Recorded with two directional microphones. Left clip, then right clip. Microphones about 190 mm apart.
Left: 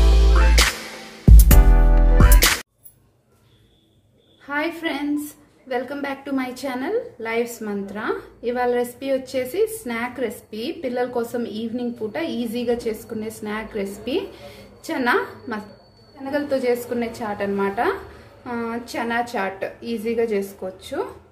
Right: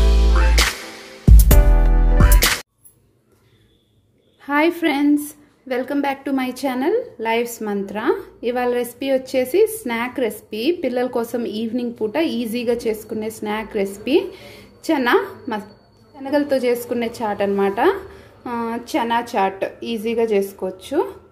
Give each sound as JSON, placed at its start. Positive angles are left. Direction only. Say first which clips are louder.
{"t": 0.4, "sound": "music", "louder": "even", "side_deg": 0}
{"t": 4.5, "sound": "a woman's voice", "louder": "right 7 dB", "side_deg": -40}